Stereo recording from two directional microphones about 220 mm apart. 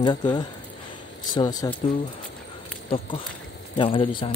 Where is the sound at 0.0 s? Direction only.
20° left (ahead or behind).